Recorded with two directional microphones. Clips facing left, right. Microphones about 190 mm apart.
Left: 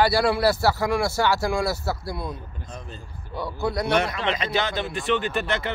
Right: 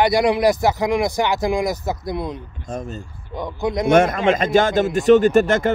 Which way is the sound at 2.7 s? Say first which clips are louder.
Right 13 dB; 45° right (ahead or behind).